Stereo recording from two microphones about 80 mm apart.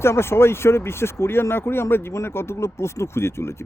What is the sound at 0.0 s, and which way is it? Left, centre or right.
Speech, left.